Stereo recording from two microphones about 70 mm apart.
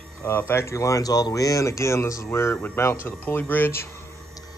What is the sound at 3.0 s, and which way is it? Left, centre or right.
Speech, left.